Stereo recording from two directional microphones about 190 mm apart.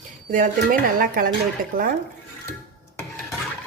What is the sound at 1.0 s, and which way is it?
Speech, 50° right (ahead or behind).